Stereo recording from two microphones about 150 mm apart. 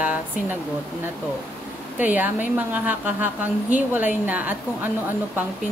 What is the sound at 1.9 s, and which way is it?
A woman's voice, 10° right (ahead or behind).